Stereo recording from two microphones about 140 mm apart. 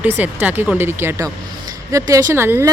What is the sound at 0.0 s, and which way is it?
Speech, 10° right (ahead or behind).